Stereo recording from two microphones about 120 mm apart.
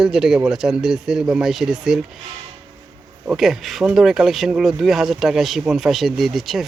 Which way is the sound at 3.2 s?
5° right (ahead or behind).